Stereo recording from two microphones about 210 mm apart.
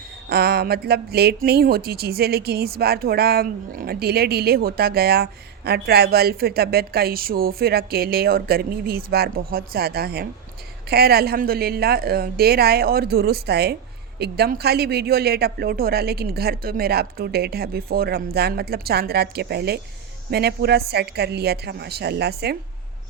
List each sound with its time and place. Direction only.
0.3 s speech: 50° right (ahead or behind)